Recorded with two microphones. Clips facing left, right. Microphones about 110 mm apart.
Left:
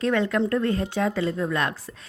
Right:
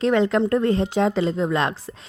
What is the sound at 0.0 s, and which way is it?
A woman's voice, 25° right (ahead or behind).